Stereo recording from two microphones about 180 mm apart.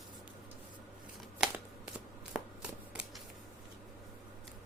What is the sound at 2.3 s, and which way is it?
Shuffling cards, 5° right (ahead or behind).